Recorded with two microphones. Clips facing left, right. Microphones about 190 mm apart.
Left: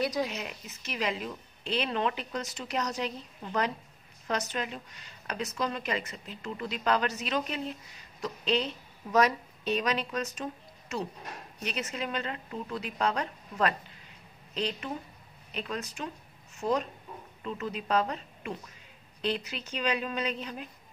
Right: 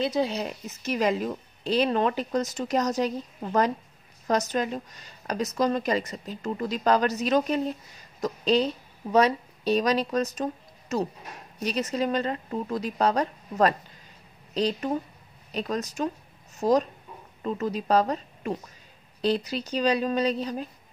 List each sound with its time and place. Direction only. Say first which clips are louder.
0.0 s a woman's voice: right 5 dB; 30° right (ahead or behind)